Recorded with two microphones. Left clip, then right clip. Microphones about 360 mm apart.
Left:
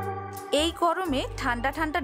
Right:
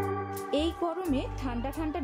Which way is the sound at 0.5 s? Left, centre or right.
Left.